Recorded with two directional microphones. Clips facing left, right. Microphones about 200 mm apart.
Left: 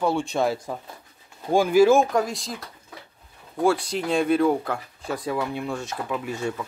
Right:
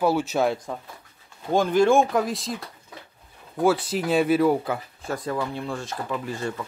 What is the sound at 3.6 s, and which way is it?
A man's voice, 5° right (ahead or behind).